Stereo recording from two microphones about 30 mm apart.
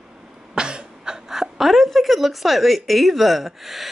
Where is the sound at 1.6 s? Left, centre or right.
Centre.